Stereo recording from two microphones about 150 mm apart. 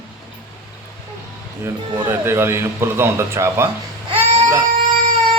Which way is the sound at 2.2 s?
15° right (ahead or behind).